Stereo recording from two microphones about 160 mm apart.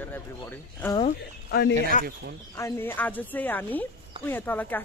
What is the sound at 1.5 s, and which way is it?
Speech, 90° left.